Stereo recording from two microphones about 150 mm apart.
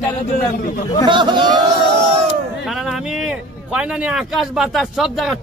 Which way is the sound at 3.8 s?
5° right (ahead or behind).